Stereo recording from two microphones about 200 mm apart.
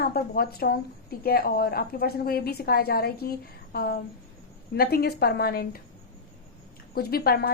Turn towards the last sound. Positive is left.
turn(degrees=50)  # may be behind; listen again after turning